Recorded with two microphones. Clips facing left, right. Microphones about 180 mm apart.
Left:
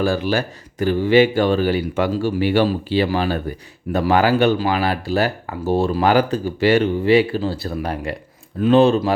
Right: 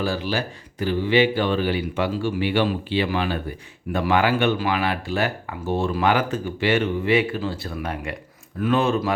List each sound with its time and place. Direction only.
0.0 s speech: 50° left (ahead or behind); by 9.1 s 30° left (ahead or behind)